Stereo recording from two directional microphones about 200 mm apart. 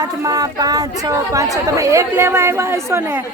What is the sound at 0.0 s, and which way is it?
A woman's voice, 20° right (ahead or behind).